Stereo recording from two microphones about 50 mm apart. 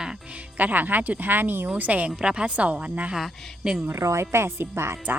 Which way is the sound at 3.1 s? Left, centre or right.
Centre.